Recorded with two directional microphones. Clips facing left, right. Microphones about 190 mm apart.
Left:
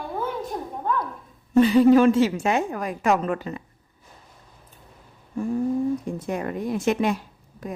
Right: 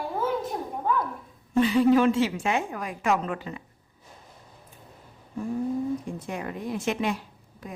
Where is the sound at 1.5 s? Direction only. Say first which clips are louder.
Left 5 dB; 40° left (ahead or behind).